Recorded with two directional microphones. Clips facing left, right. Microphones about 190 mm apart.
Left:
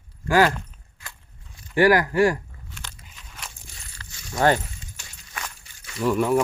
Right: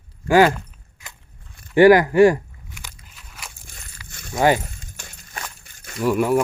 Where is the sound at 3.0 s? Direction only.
5° right (ahead or behind).